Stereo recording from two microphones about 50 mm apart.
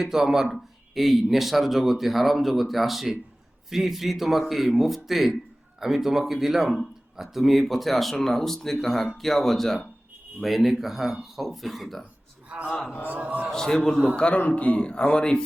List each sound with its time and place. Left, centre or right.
0.0 s speech: centre
13.1 s a man's voice: right
13.5 s a man's voice: centre
14.3 s a man's voice: left